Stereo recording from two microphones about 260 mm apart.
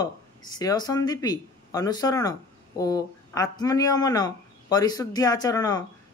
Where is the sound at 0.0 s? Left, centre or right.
Centre.